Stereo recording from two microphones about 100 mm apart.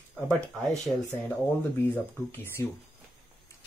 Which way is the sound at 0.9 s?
5° right (ahead or behind).